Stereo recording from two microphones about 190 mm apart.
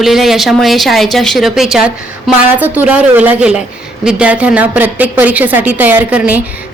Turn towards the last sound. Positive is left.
turn(degrees=-10)  # may be behind; listen again after turning